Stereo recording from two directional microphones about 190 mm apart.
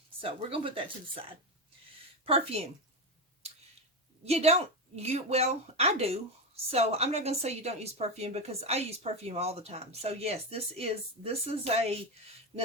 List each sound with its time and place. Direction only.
0.2 s speech: 30° right (ahead or behind)
2.2 s a woman's voice: 30° right (ahead or behind)
4.3 s a woman's voice: 35° right (ahead or behind)